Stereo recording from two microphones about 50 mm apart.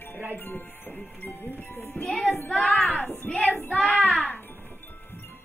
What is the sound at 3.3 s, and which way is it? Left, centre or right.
Child singing, left.